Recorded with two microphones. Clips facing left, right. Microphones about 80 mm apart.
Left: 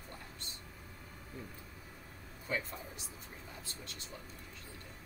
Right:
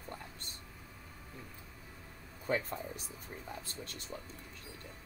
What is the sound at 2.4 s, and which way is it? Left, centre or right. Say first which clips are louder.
Speech: right 4 dB; right.